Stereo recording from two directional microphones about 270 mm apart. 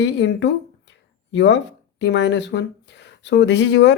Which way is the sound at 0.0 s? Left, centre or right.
Left.